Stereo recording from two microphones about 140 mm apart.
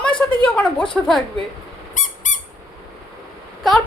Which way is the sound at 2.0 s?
65° left (ahead or behind).